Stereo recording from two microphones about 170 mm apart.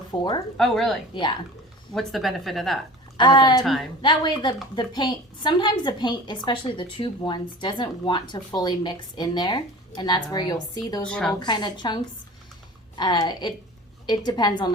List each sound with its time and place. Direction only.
0.1 s a woman's voice: 25° left (ahead or behind)
0.5 s speech: centre (ahead or behind)
1.1 s a woman's voice: 30° left (ahead or behind)
1.9 s speech: centre (ahead or behind)
3.2 s a woman's voice: 25° left (ahead or behind)
3.6 s speech: centre (ahead or behind)
4.0 s a woman's voice: 25° left (ahead or behind)
11.0 s speech: 5° left (ahead or behind)
11.3 s a woman's voice: 25° left (ahead or behind)
13.0 s a woman's voice: 25° left (ahead or behind)